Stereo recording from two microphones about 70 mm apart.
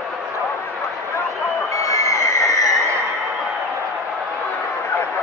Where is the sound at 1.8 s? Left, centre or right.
Left.